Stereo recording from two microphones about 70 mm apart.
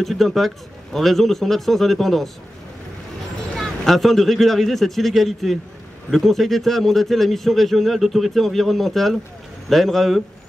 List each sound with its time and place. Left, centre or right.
0.0 s a man's voice: centre
3.5 s a man's voice: centre